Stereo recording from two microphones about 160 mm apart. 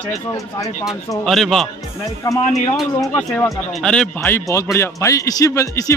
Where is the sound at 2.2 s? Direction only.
20° left (ahead or behind).